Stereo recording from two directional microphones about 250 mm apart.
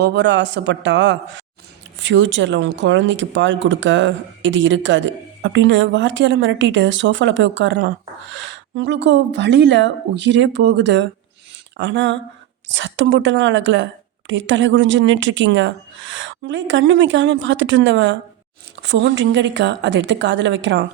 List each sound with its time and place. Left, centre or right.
0.0 s speech: right